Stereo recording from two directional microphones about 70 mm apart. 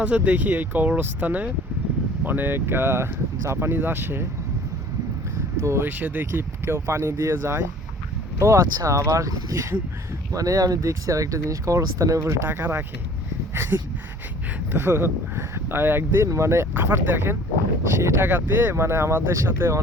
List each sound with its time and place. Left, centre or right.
0.0 s speech: centre
5.8 s speech: right
12.5 s speech: right
13.5 s dog: right
14.7 s speech: right
16.2 s speech: right